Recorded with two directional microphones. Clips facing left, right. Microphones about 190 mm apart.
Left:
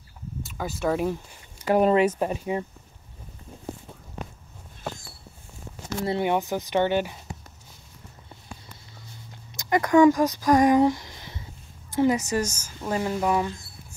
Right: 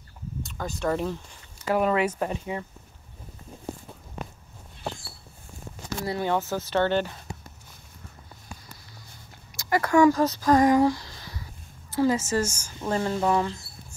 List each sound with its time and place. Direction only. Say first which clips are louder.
0.4 s speech: left 2 dB; 5° left (ahead or behind)
1.7 s speech: left 4 dB; 30° left (ahead or behind)
5.8 s speech: left 3 dB; 25° left (ahead or behind)
9.5 s a sound: left 2 dB; 20° left (ahead or behind)
12.4 s speech: right 1 dB; 10° right (ahead or behind)
12.8 s speech: even; 10° left (ahead or behind)